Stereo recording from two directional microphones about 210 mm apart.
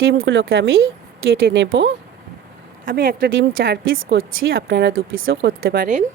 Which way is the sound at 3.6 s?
55° right (ahead or behind).